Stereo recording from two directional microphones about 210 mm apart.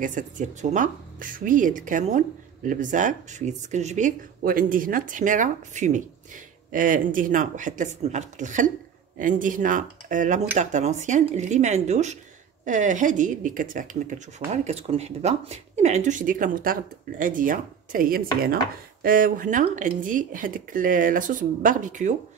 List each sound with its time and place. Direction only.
0.0 s speech: 35° right (ahead or behind)